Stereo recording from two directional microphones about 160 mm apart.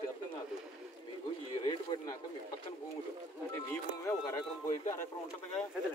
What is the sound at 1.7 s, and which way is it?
Speech, 30° left (ahead or behind).